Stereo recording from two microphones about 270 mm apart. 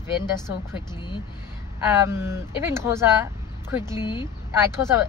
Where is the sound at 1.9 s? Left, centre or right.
Centre.